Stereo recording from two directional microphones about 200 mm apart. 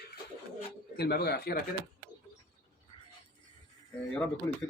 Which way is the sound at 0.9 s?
50° left (ahead or behind).